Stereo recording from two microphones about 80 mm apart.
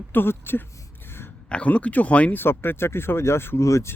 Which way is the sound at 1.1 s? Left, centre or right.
Left.